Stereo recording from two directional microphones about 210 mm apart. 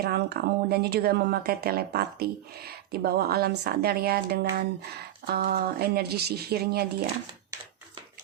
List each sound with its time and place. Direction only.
0.0 s speech: 50° right (ahead or behind)